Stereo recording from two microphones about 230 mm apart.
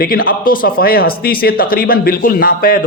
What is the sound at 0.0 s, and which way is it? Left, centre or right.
A man's voice, left.